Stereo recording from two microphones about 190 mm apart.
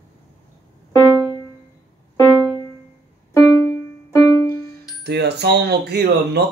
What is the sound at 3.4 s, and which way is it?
Music, 15° left (ahead or behind).